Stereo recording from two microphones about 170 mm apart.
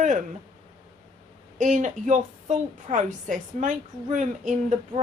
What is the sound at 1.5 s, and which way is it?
A woman's voice, 50° right (ahead or behind).